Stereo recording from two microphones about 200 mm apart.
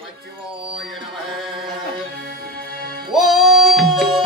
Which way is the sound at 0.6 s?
Centre (ahead or behind).